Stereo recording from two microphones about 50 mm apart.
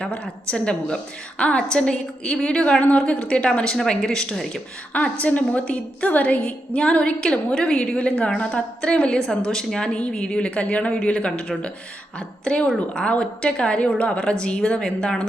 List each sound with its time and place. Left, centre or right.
0.0 s a woman's voice: left; by 4.6 s centre
5.2 s a woman's voice: left; by 15.3 s centre